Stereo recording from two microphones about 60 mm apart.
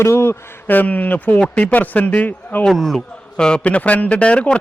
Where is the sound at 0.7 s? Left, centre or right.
Left.